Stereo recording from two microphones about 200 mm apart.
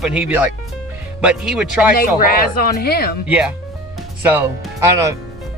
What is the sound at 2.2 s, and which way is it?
Speech, 45° left (ahead or behind).